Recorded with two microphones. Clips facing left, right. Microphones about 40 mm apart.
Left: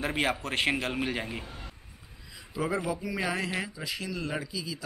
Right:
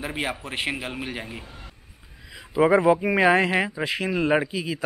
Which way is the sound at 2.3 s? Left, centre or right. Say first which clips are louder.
Right 12 dB; right.